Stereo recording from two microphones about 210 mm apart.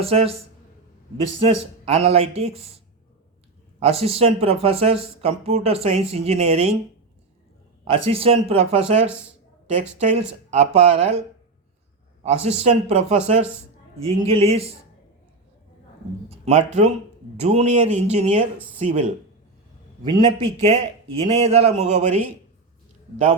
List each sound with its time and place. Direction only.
0.0 s speech: 30° right (ahead or behind)
1.4 s speech: 25° right (ahead or behind)
3.8 s speech: 30° right (ahead or behind)
7.9 s speech: 25° right (ahead or behind)
12.2 s speech: 30° right (ahead or behind)
16.3 s speech: 35° right (ahead or behind)
20.1 s speech: 25° right (ahead or behind)